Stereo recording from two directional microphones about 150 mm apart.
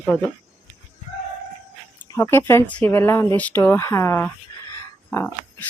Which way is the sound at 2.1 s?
15° left (ahead or behind).